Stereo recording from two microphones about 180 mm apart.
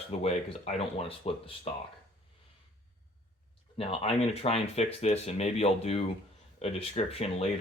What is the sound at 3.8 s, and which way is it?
Speech, 30° left (ahead or behind).